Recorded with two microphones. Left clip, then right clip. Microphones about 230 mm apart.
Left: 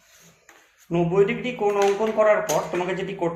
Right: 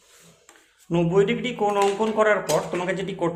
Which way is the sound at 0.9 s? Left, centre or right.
Right.